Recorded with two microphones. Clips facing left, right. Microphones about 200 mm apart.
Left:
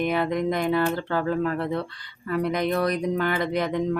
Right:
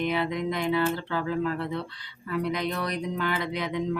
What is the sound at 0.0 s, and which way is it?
Speech, 45° left (ahead or behind).